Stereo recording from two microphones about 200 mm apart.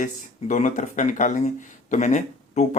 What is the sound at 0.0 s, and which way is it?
Speech, 40° left (ahead or behind).